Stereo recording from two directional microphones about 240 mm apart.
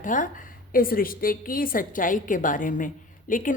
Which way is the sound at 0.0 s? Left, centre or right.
Left.